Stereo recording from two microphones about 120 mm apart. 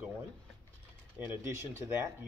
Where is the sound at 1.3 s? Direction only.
20° right (ahead or behind).